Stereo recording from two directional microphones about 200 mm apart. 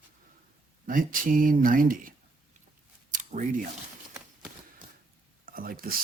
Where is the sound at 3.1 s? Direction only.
40° right (ahead or behind).